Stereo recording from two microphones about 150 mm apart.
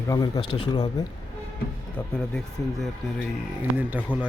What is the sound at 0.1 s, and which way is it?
Speech, 25° left (ahead or behind).